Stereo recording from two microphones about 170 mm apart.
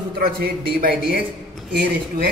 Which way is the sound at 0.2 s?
65° right (ahead or behind).